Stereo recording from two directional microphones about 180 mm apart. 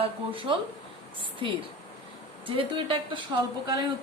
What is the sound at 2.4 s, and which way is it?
Speech, 30° right (ahead or behind).